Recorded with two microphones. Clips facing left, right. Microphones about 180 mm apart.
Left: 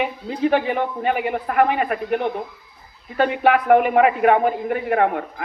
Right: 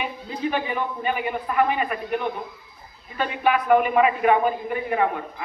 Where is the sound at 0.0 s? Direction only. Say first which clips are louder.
Left 6 dB; 70° left (ahead or behind).